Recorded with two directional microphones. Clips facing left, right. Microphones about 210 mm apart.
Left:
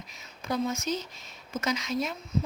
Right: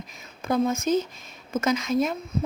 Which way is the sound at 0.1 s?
50° right (ahead or behind).